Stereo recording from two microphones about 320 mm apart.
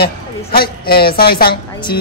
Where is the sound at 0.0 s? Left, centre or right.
Left.